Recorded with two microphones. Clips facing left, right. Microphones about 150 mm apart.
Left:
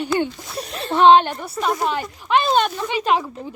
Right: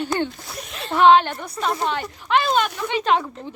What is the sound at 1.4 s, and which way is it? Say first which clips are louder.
A woman's voice: left 2 dB; 5° left (ahead or behind).